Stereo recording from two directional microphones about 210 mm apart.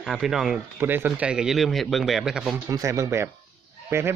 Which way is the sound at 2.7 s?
15° right (ahead or behind).